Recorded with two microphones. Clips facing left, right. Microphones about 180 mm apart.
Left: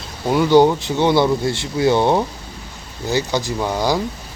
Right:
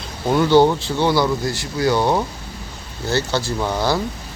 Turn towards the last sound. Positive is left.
turn(degrees=10)  # may be behind; listen again after turning